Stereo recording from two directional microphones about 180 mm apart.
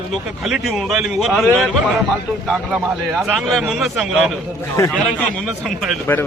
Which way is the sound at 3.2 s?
Centre (ahead or behind).